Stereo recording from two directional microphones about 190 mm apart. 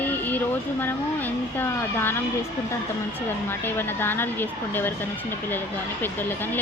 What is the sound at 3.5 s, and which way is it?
Speech, 10° left (ahead or behind).